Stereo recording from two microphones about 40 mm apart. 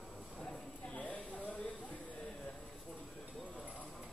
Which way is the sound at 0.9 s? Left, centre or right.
Left.